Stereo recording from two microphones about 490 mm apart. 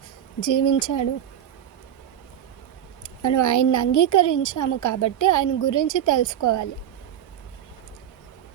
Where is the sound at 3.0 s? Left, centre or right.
Left.